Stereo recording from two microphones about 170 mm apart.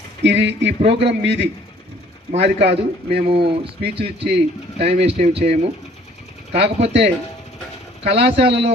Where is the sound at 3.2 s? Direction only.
35° right (ahead or behind).